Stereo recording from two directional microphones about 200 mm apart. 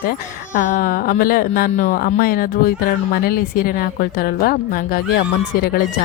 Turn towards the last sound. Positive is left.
turn(degrees=45)  # may be behind; listen again after turning